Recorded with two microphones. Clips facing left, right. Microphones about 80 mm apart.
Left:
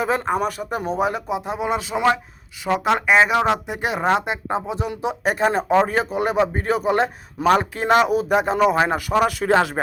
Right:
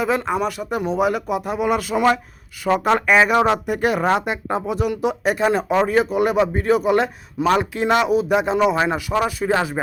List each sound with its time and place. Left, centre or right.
0.0 s speech: left
1.3 s speech: left
9.2 s speech: left